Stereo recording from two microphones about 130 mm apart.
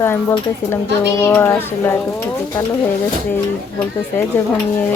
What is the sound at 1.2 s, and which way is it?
Speech, 15° left (ahead or behind).